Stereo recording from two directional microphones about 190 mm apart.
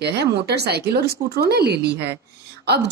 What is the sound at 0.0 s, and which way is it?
Speech, 60° right (ahead or behind).